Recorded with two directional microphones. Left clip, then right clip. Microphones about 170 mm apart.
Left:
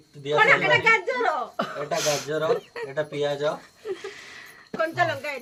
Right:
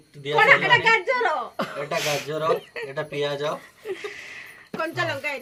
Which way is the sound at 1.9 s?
10° left (ahead or behind).